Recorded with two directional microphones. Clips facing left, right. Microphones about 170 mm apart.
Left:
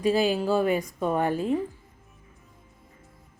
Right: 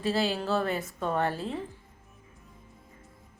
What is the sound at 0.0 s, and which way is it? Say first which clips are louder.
Speech: left 5 dB; 15° left (ahead or behind).